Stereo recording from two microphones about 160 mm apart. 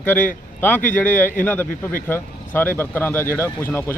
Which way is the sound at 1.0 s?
10° left (ahead or behind).